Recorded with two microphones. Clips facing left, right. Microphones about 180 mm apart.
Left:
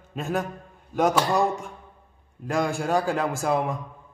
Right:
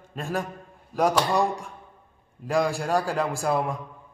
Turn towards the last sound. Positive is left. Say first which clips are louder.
# left 1 dB
turn(degrees=0)  # may be behind; listen again after turning